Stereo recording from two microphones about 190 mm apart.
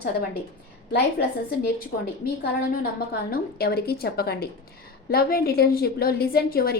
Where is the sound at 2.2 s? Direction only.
50° left (ahead or behind).